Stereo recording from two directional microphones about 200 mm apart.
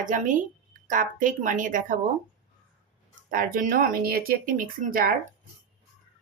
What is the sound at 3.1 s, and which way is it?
Speech, 45° right (ahead or behind).